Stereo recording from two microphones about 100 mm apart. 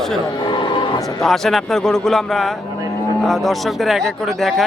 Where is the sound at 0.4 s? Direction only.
50° left (ahead or behind).